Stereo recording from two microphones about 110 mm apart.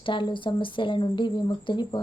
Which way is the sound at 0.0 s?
50° left (ahead or behind).